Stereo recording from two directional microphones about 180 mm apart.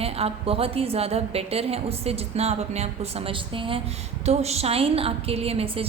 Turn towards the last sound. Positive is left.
turn(degrees=-35)  # may be behind; listen again after turning